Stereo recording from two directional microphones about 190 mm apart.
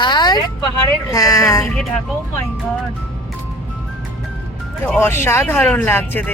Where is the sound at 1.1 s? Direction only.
15° left (ahead or behind).